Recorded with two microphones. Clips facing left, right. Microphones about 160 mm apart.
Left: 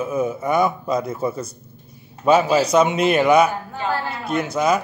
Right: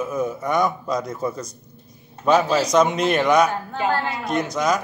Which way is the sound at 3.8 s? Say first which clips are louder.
Right 2 dB; 15° right (ahead or behind).